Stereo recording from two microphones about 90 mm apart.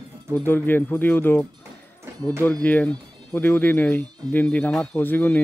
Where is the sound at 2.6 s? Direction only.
15° left (ahead or behind).